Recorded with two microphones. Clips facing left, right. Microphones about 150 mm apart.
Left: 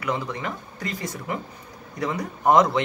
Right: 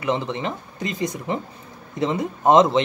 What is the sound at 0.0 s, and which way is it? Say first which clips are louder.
Speech: right 4 dB; 25° right (ahead or behind).